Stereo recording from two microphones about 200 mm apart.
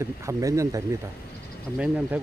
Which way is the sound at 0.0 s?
15° right (ahead or behind).